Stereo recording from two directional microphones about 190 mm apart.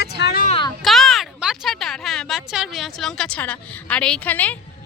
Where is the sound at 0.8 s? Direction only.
Centre (ahead or behind).